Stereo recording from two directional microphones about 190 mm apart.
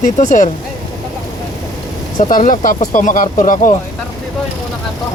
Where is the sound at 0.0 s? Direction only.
40° left (ahead or behind).